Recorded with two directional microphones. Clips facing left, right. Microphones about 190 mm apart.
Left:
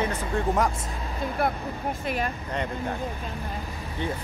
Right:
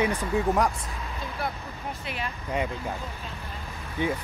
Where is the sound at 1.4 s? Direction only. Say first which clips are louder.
Left 6 dB; 55° left (ahead or behind).